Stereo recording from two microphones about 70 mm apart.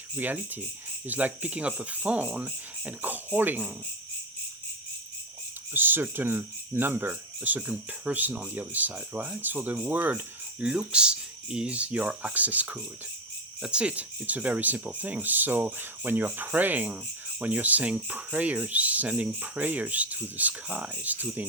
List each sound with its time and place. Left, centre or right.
0.2 s speech: right
5.7 s speech: right
10.6 s speech: centre